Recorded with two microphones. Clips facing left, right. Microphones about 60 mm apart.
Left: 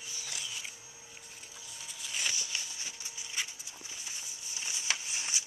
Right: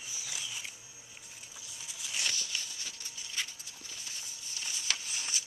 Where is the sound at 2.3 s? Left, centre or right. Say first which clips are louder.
Even; centre.